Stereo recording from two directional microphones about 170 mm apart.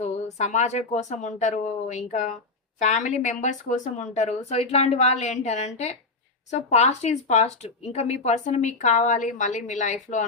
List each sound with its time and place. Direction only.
0.3 s speech: 40° left (ahead or behind)